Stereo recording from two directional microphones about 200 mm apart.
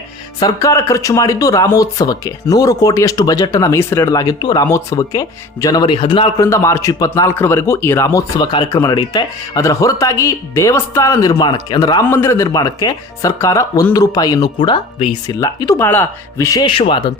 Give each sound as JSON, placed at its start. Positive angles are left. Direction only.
{"t": 0.3, "sound": "speech", "side_deg": 15}